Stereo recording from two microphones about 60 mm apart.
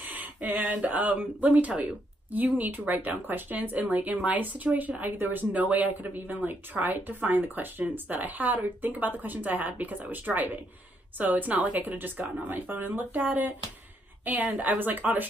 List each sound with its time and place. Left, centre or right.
0.0 s speech: right